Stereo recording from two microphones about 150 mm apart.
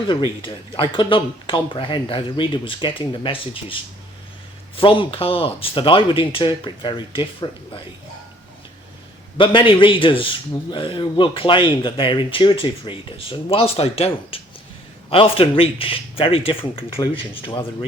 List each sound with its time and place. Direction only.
0.1 s speech: 35° left (ahead or behind)
4.8 s speech: 35° left (ahead or behind)
9.4 s speech: 35° left (ahead or behind)